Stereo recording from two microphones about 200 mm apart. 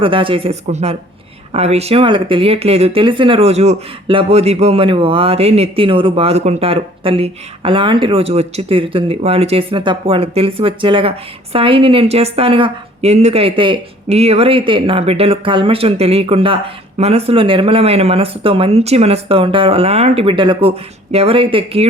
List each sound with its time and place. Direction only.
0.0 s speech: 25° right (ahead or behind)